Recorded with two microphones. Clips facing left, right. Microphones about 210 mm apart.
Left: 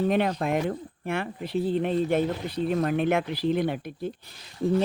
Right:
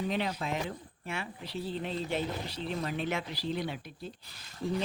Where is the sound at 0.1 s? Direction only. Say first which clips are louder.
Left 9 dB; 55° left (ahead or behind).